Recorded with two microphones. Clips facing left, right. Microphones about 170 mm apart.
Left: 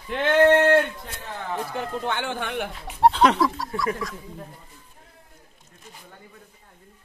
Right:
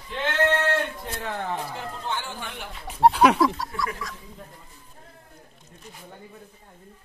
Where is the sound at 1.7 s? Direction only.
65° left (ahead or behind).